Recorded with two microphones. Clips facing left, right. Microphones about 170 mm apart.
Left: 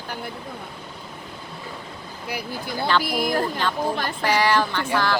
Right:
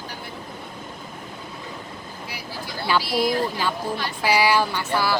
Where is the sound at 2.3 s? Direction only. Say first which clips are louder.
Left 6 dB; 55° left (ahead or behind).